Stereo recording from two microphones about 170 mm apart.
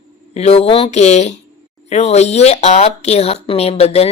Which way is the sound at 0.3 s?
40° left (ahead or behind).